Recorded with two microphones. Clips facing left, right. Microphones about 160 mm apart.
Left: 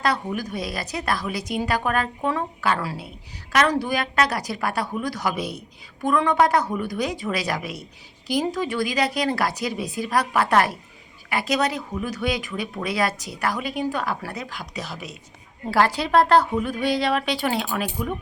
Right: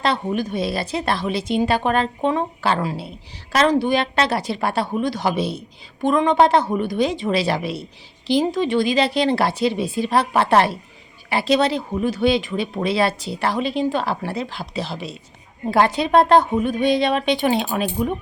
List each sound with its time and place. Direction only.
0.0 s a woman's voice: 25° right (ahead or behind)